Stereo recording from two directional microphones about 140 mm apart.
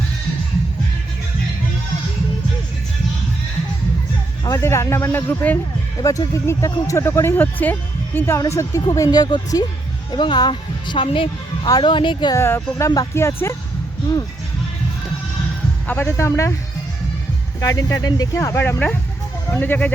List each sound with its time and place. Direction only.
4.4 s a woman's voice: 20° left (ahead or behind)
12.4 s speech: 20° left (ahead or behind)
15.9 s speech: 15° left (ahead or behind)
17.6 s speech: 25° left (ahead or behind)